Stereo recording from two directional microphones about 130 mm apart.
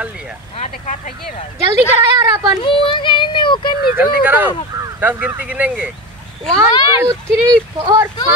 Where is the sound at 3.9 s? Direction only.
15° right (ahead or behind).